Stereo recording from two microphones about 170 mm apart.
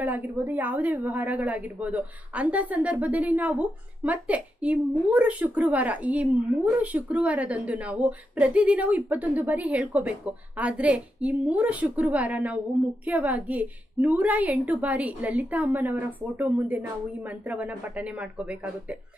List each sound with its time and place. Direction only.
0.0 s a woman's voice: 10° right (ahead or behind)